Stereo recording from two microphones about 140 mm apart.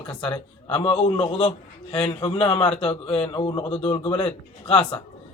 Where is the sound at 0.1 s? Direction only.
40° left (ahead or behind).